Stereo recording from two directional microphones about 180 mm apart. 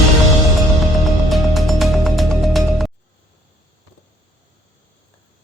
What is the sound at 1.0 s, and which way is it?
Music, centre (ahead or behind).